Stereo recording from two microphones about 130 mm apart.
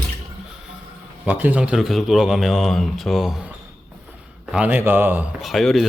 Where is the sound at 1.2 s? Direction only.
10° right (ahead or behind).